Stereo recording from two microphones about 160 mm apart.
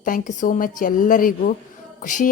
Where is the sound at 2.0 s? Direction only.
55° left (ahead or behind).